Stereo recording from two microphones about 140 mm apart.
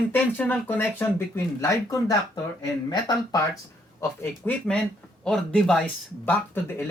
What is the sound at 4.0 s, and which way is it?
Speech, 10° left (ahead or behind).